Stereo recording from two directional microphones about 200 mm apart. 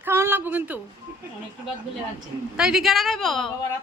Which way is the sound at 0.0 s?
10° right (ahead or behind).